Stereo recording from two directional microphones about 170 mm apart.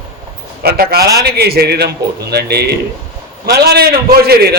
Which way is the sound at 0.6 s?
65° right (ahead or behind).